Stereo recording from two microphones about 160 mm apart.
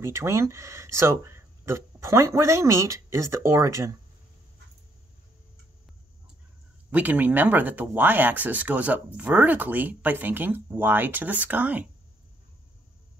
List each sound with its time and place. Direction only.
0.0 s speech: 15° right (ahead or behind)
6.9 s speech: 10° right (ahead or behind)